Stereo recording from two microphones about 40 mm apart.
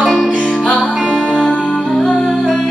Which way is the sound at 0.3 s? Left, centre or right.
Left.